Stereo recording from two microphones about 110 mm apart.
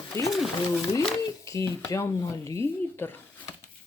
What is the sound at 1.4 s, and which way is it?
Speech, 25° left (ahead or behind).